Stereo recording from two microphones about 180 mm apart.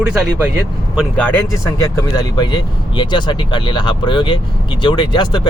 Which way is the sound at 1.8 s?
20° left (ahead or behind).